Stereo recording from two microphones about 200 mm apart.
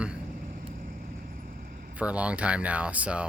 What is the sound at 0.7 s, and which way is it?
Vehicle, 45° right (ahead or behind).